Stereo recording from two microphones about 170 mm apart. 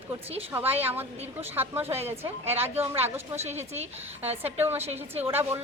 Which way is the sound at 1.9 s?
35° right (ahead or behind).